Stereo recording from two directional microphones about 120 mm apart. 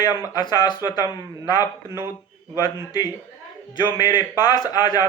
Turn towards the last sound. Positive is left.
turn(degrees=35)  # may be behind; listen again after turning